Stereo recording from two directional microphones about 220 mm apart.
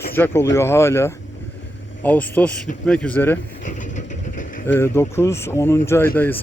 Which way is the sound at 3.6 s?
35° left (ahead or behind).